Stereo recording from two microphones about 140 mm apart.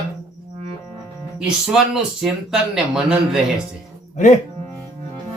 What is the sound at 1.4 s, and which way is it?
Speech, 5° right (ahead or behind).